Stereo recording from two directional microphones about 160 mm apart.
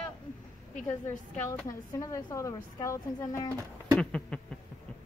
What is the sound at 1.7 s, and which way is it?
A woman's voice, 20° left (ahead or behind).